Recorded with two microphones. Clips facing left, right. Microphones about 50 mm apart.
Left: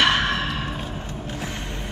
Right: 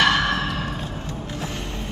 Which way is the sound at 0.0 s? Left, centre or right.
Left.